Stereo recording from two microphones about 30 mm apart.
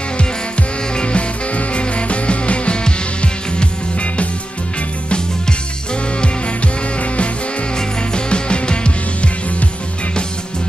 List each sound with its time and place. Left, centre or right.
0.2 s music: left
6.2 s music: left